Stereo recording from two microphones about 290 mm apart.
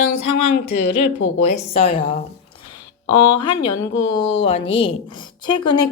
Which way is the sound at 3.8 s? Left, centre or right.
Centre.